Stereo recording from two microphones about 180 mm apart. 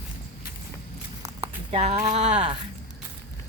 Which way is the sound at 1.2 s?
30° right (ahead or behind).